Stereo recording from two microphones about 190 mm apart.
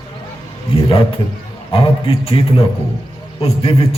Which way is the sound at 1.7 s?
30° left (ahead or behind).